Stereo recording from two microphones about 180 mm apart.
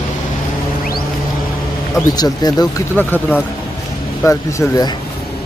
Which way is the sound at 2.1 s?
20° left (ahead or behind).